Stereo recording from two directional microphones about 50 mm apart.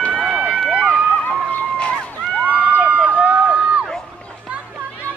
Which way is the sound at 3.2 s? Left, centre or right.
Right.